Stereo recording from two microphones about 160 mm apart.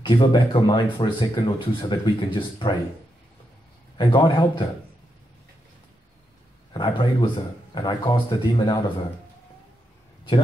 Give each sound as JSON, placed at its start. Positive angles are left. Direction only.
{"t": 0.0, "sound": "speech", "side_deg": 30}
{"t": 4.0, "sound": "speech", "side_deg": 30}
{"t": 6.7, "sound": "speech", "side_deg": 30}